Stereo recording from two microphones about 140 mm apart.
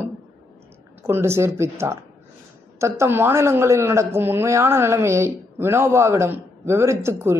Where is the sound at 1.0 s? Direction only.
20° right (ahead or behind).